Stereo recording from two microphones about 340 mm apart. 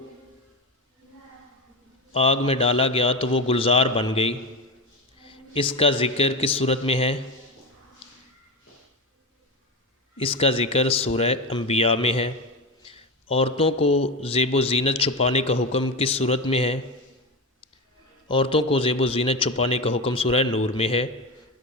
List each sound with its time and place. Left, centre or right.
2.1 s a man's voice: centre
10.2 s a man's voice: centre
13.3 s a man's voice: centre
18.3 s a man's voice: centre